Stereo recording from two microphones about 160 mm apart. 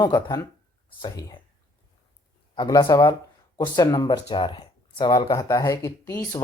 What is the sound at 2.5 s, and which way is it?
A woman's voice, 25° left (ahead or behind).